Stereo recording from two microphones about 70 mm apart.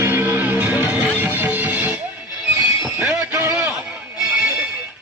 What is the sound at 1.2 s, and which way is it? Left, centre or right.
Music, right.